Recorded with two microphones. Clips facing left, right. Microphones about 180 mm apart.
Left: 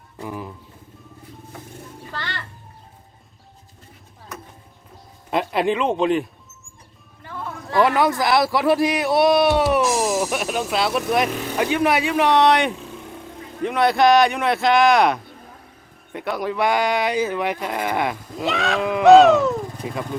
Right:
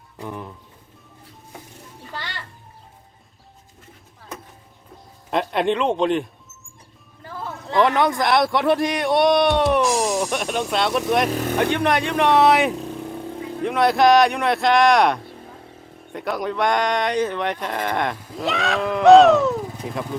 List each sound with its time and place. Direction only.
0.2 s speech: 5° left (ahead or behind)
2.1 s a sound: 10° right (ahead or behind)
5.3 s speech: 5° left (ahead or behind)
7.8 s speech: 5° left (ahead or behind)